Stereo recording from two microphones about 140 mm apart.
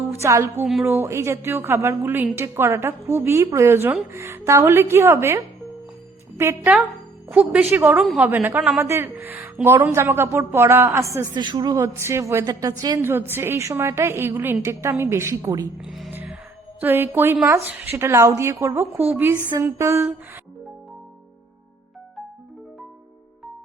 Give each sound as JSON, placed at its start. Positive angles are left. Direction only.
{"t": 0.1, "sound": "a woman's voice", "side_deg": -20}
{"t": 11.3, "sound": "a woman's voice", "side_deg": -30}
{"t": 13.1, "sound": "a woman's voice", "side_deg": -15}
{"t": 15.8, "sound": "speech", "side_deg": -5}
{"t": 16.1, "sound": "music", "side_deg": -10}
{"t": 16.8, "sound": "a woman's voice", "side_deg": -15}